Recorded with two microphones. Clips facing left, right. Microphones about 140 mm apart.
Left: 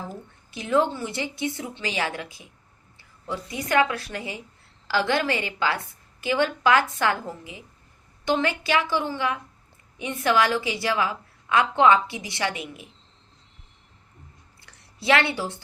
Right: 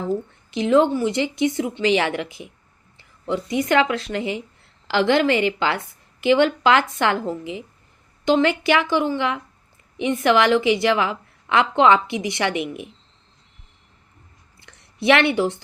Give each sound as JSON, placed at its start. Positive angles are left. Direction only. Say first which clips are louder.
{"t": 0.0, "sound": "a woman's voice", "louder": "right 12 dB", "side_deg": -20}
{"t": 1.9, "sound": "a woman's voice", "louder": "right 8 dB", "side_deg": -70}
{"t": 3.6, "sound": "a woman's voice", "louder": "right 2 dB", "side_deg": -20}
{"t": 10.5, "sound": "a woman's voice", "louder": "right 8 dB", "side_deg": -20}
{"t": 14.6, "sound": "a sound", "louder": "right 10 dB", "side_deg": -20}